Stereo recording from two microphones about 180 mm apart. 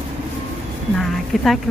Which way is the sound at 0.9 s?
Centre (ahead or behind).